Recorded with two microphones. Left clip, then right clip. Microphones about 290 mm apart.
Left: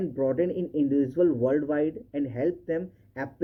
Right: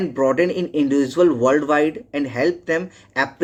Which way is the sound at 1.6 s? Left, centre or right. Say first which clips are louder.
Right 9 dB; right.